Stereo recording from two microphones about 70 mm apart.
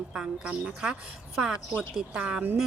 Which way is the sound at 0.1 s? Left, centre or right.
Centre.